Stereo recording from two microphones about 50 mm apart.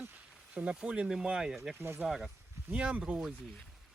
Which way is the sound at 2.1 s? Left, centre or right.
Centre.